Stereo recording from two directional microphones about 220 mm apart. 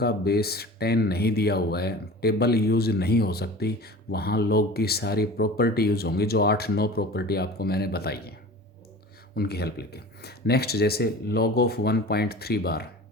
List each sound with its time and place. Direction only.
0.0 s speech: 45° left (ahead or behind)